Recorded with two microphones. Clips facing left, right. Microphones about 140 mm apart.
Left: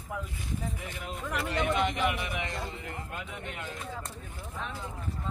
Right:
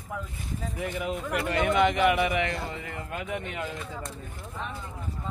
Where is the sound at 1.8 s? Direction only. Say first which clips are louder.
Right 7 dB; 70° right (ahead or behind).